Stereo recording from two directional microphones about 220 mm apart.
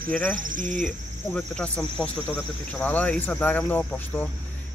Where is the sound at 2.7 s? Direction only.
5° left (ahead or behind).